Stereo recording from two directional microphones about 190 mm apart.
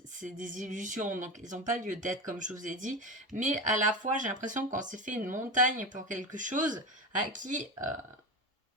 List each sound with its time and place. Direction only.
0.2 s speech: 45° right (ahead or behind)